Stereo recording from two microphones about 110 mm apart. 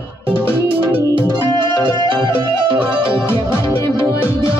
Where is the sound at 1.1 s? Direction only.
45° right (ahead or behind).